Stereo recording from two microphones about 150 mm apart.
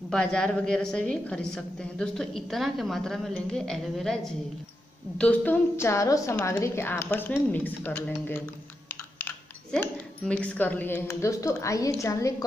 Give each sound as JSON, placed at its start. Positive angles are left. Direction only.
{"t": 0.1, "sound": "a woman's voice", "side_deg": 5}